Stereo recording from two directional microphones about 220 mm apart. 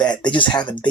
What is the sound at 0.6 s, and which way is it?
Speech, 20° left (ahead or behind).